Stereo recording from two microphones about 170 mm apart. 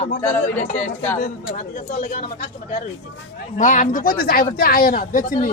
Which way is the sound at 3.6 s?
50° left (ahead or behind).